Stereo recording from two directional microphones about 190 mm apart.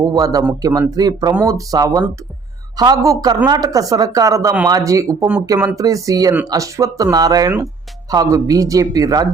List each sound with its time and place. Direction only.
0.0 s speech: 20° right (ahead or behind)